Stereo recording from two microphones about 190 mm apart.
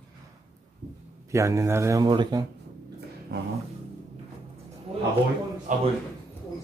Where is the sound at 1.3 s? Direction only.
15° right (ahead or behind).